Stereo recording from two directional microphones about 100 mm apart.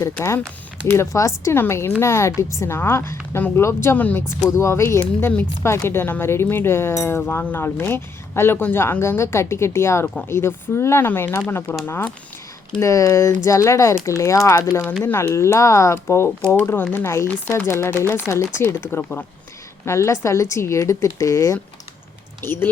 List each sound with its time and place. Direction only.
0.9 s speech: 30° left (ahead or behind)
4.4 s speech: 30° left (ahead or behind)
12.8 s speech: 30° left (ahead or behind)